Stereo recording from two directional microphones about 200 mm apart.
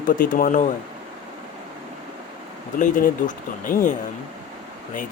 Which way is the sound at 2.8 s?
40° left (ahead or behind).